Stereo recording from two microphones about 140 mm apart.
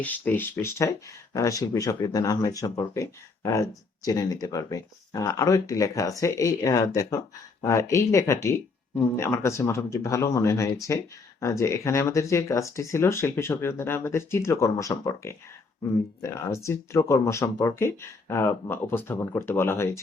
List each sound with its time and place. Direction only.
0.0 s speech: 10° left (ahead or behind)